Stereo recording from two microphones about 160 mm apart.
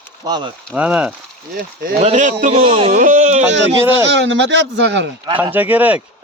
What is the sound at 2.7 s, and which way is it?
Speech, 35° right (ahead or behind).